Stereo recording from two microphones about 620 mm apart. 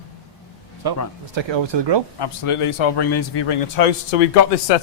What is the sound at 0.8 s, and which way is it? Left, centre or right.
Speech, right.